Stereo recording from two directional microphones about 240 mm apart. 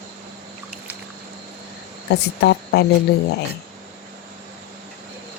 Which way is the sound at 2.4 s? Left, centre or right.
Left.